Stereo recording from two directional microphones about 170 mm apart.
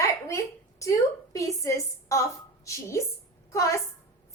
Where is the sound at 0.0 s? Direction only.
20° left (ahead or behind).